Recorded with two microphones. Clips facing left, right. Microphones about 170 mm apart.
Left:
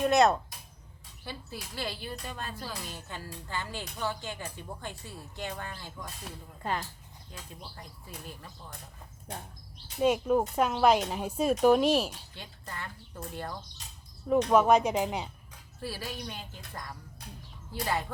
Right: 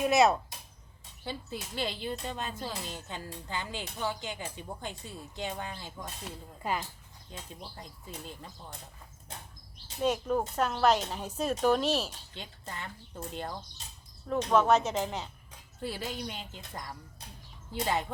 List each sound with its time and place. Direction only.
0.0 s speech: 5° right (ahead or behind)
1.2 s speech: 20° right (ahead or behind)
7.3 s speech: 20° right (ahead or behind)
10.0 s speech: 10° left (ahead or behind)
12.3 s speech: 20° right (ahead or behind)
14.3 s speech: 10° left (ahead or behind)
15.8 s speech: 20° right (ahead or behind)